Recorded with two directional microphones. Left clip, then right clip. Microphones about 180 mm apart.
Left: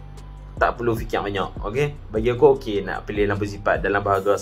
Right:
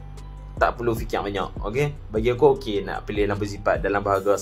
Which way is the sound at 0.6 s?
5° right (ahead or behind).